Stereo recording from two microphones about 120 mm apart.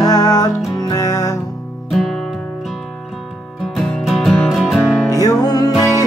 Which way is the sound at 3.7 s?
5° left (ahead or behind).